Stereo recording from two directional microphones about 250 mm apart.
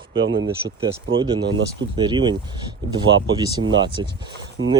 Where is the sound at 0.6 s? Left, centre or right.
Centre.